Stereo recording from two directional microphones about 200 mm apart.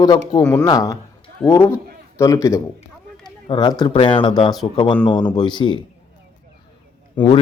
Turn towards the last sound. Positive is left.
turn(degrees=10)  # may be behind; listen again after turning